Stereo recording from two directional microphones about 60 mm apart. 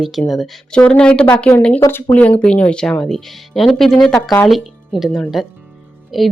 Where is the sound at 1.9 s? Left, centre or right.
Left.